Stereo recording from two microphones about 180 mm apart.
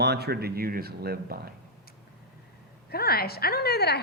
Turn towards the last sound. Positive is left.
turn(degrees=65)  # may be behind; listen again after turning